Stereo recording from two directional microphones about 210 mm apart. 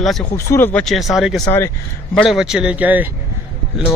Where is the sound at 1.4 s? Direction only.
10° left (ahead or behind).